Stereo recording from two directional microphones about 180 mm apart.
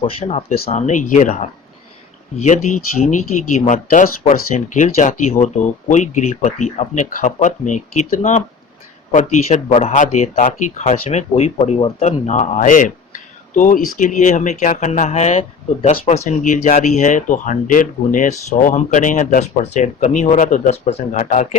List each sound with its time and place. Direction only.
0.0 s speech: 35° left (ahead or behind)